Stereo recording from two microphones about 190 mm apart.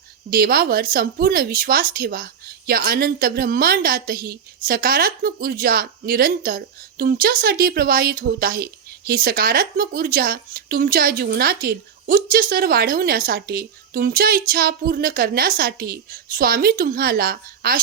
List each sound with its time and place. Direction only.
0.3 s a woman's voice: 50° right (ahead or behind)